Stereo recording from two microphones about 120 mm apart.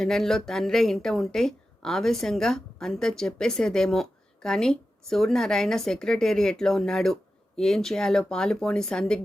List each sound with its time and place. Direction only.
0.0 s speech: 5° left (ahead or behind)